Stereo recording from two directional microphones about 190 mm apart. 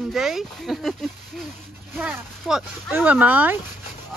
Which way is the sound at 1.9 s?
Centre (ahead or behind).